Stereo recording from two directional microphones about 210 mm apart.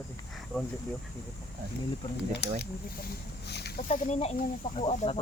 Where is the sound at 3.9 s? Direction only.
30° left (ahead or behind).